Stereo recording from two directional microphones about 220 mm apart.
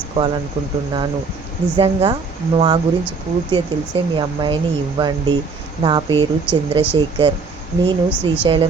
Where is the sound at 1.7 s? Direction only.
25° right (ahead or behind).